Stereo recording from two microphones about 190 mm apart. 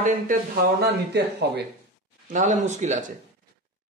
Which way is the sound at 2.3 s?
40° right (ahead or behind).